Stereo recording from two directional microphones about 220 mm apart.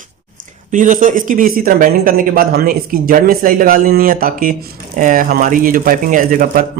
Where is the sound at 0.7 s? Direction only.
35° right (ahead or behind).